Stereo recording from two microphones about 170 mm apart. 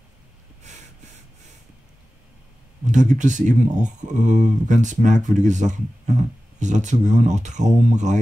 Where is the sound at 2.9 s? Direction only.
45° right (ahead or behind).